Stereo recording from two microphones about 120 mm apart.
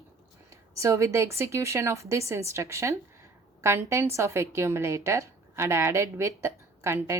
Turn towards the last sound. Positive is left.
turn(degrees=-20)  # may be behind; listen again after turning